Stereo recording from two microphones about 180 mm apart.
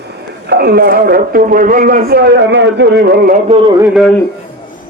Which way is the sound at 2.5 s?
75° right (ahead or behind).